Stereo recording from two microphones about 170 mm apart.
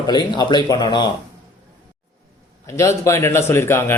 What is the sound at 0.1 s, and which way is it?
Speech, 25° left (ahead or behind).